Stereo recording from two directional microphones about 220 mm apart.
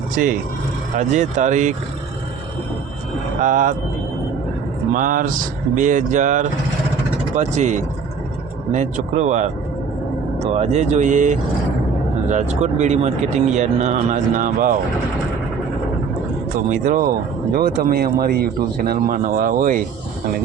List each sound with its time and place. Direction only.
0.9 s speech: 35° right (ahead or behind)
3.4 s speech: 35° right (ahead or behind)
4.9 s speech: 35° right (ahead or behind)
16.8 s speech: 35° right (ahead or behind)